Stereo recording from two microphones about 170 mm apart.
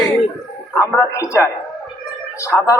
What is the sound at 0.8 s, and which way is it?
Speech, 15° left (ahead or behind).